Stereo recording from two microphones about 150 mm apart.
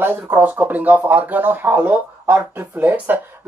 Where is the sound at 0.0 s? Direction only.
15° right (ahead or behind).